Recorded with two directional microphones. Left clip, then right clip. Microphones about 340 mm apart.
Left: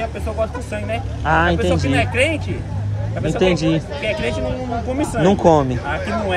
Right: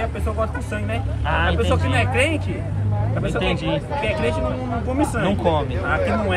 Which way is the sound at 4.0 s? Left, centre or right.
Centre.